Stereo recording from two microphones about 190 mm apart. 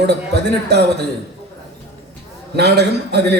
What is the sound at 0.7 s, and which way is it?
Speech, 60° right (ahead or behind).